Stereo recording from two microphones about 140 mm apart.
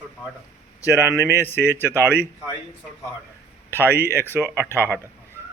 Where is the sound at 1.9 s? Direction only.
20° right (ahead or behind).